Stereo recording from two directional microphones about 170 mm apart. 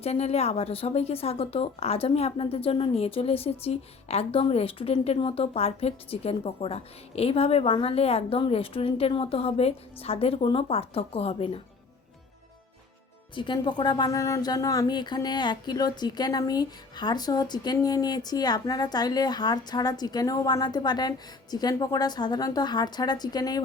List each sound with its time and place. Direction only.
0.0 s a woman's voice: 40° left (ahead or behind)
13.3 s speech: 30° left (ahead or behind)